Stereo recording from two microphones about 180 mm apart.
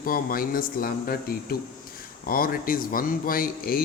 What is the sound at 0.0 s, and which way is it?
Speech, 55° left (ahead or behind).